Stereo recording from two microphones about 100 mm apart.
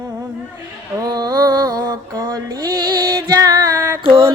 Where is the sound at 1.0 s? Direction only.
40° right (ahead or behind).